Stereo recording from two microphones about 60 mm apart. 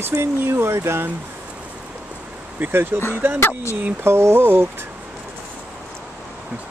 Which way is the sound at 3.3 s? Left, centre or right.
Left.